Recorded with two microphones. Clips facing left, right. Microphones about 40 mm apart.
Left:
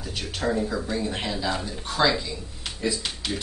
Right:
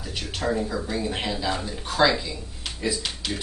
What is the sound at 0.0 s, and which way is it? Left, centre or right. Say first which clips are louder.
Speech: even; centre.